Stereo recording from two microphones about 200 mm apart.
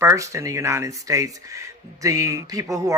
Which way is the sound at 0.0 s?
15° right (ahead or behind).